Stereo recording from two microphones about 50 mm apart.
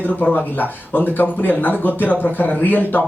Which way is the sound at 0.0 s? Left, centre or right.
Left.